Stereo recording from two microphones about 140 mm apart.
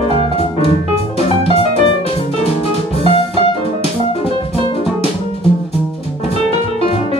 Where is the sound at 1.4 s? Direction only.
40° left (ahead or behind).